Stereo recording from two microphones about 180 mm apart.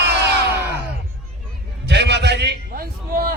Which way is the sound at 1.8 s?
70° right (ahead or behind).